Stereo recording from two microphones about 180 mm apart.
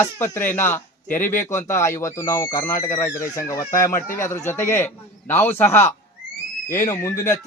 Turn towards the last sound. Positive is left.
turn(degrees=15)  # may be behind; listen again after turning